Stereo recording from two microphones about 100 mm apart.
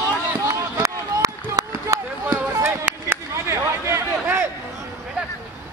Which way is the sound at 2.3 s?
25° right (ahead or behind).